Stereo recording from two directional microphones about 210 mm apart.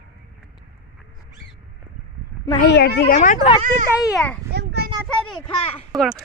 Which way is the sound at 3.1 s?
35° left (ahead or behind).